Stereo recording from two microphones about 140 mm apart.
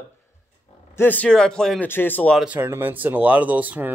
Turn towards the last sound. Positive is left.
turn(degrees=-10)  # may be behind; listen again after turning